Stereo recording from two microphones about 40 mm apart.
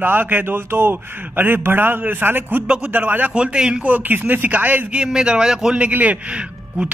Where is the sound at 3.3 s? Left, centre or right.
Right.